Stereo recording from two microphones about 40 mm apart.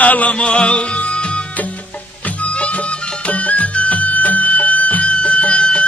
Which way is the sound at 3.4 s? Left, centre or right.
Left.